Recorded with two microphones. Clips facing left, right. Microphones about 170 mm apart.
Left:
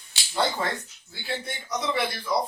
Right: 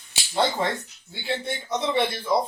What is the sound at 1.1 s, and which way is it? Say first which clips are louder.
Speech: right 4 dB; 25° right (ahead or behind).